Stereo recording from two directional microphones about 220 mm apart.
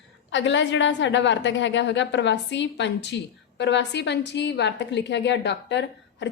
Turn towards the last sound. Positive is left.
turn(degrees=50)  # may be behind; listen again after turning